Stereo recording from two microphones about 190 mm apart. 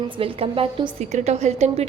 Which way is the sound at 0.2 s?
30° right (ahead or behind).